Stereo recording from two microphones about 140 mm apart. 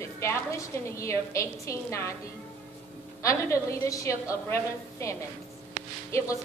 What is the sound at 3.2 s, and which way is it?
A woman's voice, 25° left (ahead or behind).